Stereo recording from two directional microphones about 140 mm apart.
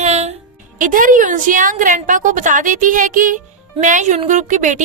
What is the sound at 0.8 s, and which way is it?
A woman's voice, 70° right (ahead or behind).